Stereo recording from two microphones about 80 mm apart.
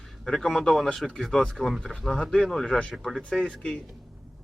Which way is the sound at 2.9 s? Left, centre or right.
Centre.